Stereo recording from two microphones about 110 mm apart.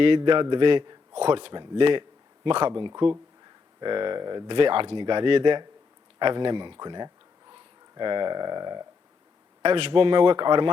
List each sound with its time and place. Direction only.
0.0 s a man's voice: 50° right (ahead or behind)
9.6 s speech: 55° right (ahead or behind)